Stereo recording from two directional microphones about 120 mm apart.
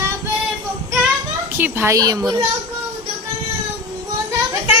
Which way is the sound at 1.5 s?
20° right (ahead or behind).